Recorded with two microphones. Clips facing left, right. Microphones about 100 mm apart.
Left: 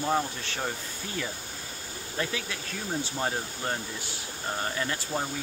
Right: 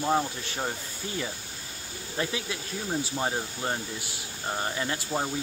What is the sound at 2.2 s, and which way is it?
Speech, 15° right (ahead or behind).